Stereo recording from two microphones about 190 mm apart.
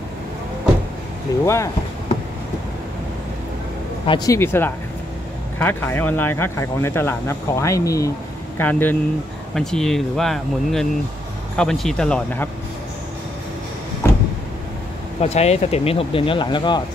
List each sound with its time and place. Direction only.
1.4 s speech: 15° left (ahead or behind)
4.0 s speech: 25° left (ahead or behind); by 12.4 s 5° left (ahead or behind)
14.0 s vehicle: 10° left (ahead or behind)
15.1 s speech: 35° left (ahead or behind)